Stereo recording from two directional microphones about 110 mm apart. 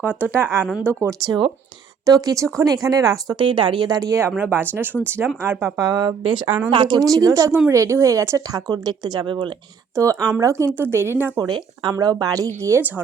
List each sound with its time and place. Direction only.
0.1 s a woman's voice: 20° right (ahead or behind)
3.3 s speech: 50° right (ahead or behind)
4.4 s a woman's voice: 20° right (ahead or behind)
5.8 s speech: 35° right (ahead or behind)
7.0 s speech: 30° right (ahead or behind)
9.9 s a woman's voice: 30° right (ahead or behind)
11.3 s speech: 40° right (ahead or behind)